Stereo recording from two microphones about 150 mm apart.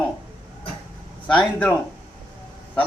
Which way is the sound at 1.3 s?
5° left (ahead or behind).